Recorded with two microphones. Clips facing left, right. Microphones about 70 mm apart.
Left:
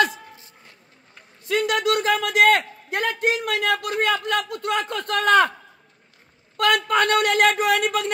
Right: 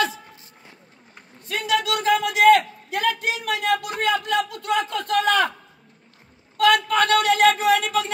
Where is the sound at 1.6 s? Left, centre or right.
Left.